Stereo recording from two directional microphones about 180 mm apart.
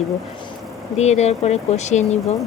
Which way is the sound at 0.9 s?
40° left (ahead or behind).